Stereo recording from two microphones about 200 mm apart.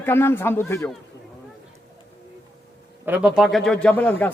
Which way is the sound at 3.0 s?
5° right (ahead or behind).